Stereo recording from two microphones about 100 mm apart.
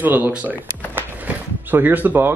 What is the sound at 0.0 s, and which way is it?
Speech, 20° right (ahead or behind).